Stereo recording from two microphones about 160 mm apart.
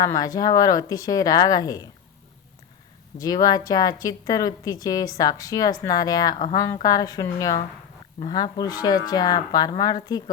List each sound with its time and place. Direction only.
0.0 s speech: 25° left (ahead or behind)
3.2 s speech: 25° left (ahead or behind)